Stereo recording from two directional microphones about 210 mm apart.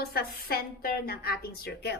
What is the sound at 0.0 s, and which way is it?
A woman's voice, 45° left (ahead or behind).